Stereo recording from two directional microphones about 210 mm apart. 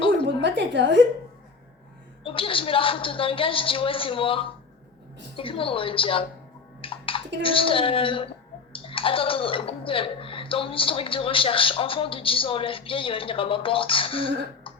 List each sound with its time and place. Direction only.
0.4 s a woman's voice: 55° right (ahead or behind)
2.2 s speech: 25° left (ahead or behind)
6.8 s a sound: 25° left (ahead or behind)
7.4 s speech: 25° left (ahead or behind)